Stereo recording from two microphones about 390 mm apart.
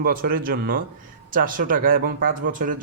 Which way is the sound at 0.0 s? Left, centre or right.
Right.